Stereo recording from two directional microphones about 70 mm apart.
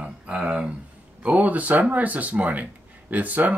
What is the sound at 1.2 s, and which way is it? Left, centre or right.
Speech, right.